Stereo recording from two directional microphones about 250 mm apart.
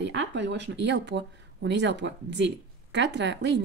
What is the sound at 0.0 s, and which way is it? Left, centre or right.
Speech, right.